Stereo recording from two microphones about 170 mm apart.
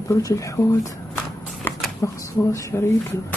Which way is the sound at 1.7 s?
15° left (ahead or behind).